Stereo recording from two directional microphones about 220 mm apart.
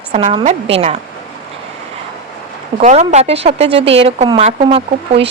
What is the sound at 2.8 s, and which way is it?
A woman's voice, 30° right (ahead or behind).